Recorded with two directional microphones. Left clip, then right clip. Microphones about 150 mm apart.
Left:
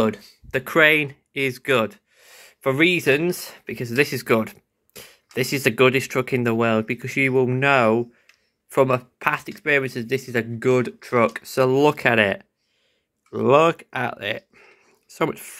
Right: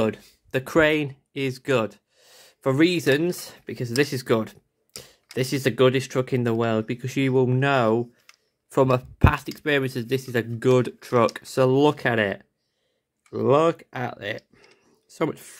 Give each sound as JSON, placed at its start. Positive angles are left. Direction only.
{"t": 0.0, "sound": "speech", "side_deg": -35}